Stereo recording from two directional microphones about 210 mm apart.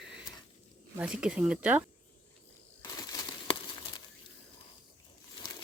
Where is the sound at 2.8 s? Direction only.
20° left (ahead or behind).